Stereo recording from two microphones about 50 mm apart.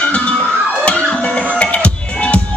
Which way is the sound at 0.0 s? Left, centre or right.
Left.